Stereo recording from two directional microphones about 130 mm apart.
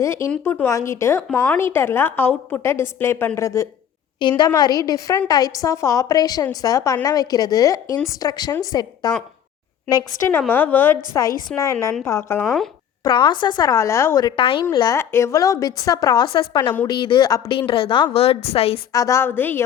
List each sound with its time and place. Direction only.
0.0 s a woman's voice: 20° left (ahead or behind)
4.2 s a woman's voice: 35° left (ahead or behind)
10.5 s a woman's voice: 15° left (ahead or behind)
11.3 s a woman's voice: 90° left
11.5 s a woman's voice: 20° left (ahead or behind)
12.4 s speech: centre (ahead or behind)
13.1 s a woman's voice: 40° left (ahead or behind); by 14.3 s 20° left (ahead or behind)
14.3 s a woman's voice: 45° left (ahead or behind)
14.9 s a woman's voice: 20° left (ahead or behind)
17.5 s a woman's voice: 40° left (ahead or behind)
18.9 s a woman's voice: 25° left (ahead or behind)